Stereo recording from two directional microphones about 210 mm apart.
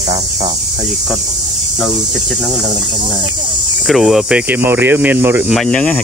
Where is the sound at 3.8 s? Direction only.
Centre (ahead or behind).